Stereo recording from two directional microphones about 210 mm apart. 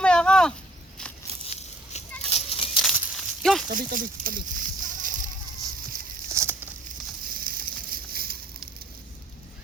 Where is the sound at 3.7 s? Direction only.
40° right (ahead or behind).